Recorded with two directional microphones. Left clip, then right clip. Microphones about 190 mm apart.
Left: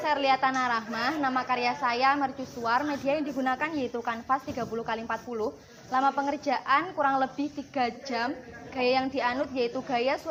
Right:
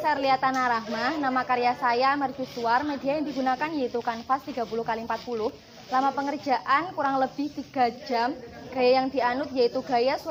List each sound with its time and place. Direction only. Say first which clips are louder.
0.0 s a woman's voice: right 1 dB; 40° left (ahead or behind)